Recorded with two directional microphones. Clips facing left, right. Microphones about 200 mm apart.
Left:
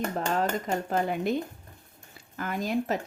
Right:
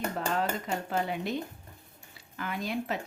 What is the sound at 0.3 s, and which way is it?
A woman's voice, 45° left (ahead or behind).